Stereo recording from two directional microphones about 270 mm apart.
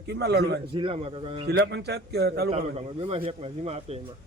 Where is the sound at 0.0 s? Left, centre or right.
Right.